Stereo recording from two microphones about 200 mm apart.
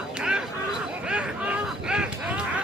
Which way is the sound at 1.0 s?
5° right (ahead or behind).